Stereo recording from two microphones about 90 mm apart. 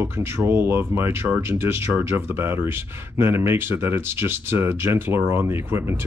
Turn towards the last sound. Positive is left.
turn(degrees=-30)  # may be behind; listen again after turning